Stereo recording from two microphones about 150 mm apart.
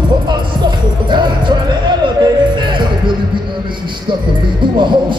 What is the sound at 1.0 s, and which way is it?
Music, 30° right (ahead or behind).